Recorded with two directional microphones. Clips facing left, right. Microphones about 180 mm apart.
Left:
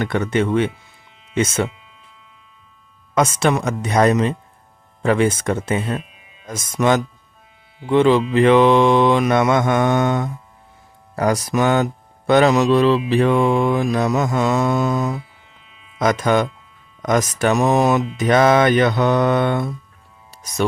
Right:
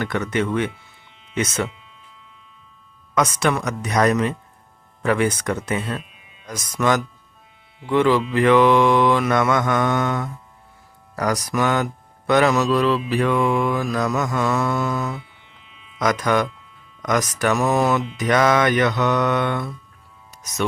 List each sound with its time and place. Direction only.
0.0 s speech: 25° left (ahead or behind)
3.2 s speech: 25° left (ahead or behind)
20.3 s music: 30° left (ahead or behind)